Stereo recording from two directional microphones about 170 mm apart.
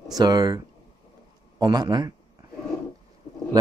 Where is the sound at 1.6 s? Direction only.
25° right (ahead or behind).